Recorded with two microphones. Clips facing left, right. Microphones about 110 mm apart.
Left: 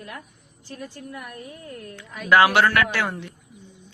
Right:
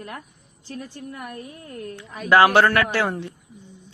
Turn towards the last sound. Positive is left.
turn(degrees=-30)  # may be behind; listen again after turning